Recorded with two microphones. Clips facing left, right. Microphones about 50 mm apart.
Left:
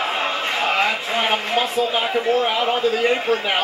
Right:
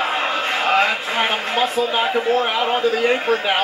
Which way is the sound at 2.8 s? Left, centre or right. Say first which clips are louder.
Right 1 dB; right.